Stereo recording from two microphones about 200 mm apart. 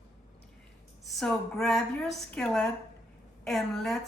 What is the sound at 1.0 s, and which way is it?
Speech, centre (ahead or behind).